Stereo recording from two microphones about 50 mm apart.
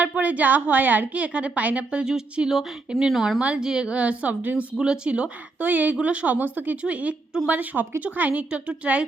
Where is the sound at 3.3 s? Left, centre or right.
Right.